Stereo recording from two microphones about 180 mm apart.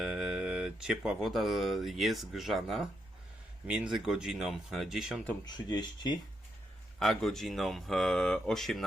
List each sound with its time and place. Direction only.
0.0 s speech: centre (ahead or behind)
5.5 s speech: 25° left (ahead or behind)
7.0 s speech: centre (ahead or behind)